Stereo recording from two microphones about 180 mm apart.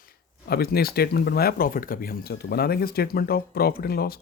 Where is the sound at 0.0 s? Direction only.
55° left (ahead or behind).